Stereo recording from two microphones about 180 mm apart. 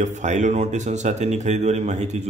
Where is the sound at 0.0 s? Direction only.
40° right (ahead or behind).